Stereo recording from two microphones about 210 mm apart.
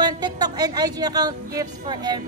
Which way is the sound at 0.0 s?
20° right (ahead or behind).